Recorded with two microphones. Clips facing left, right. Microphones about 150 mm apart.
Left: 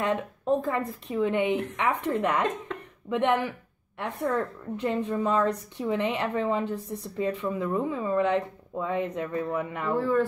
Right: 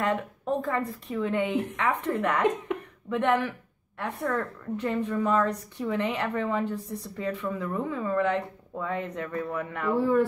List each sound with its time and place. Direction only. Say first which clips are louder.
0.0 s a woman's voice: even; 20° left (ahead or behind)
2.7 s a sound: right 5 dB; 15° right (ahead or behind)
3.1 s a woman's voice: even; 20° left (ahead or behind)
9.9 s speech: right 1 dB; 15° right (ahead or behind)